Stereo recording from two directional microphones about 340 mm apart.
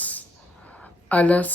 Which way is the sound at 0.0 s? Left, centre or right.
Centre.